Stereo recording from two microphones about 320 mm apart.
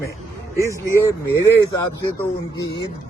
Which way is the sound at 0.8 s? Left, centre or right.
Centre.